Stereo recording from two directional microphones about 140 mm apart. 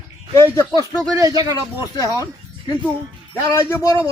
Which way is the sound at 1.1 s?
25° right (ahead or behind).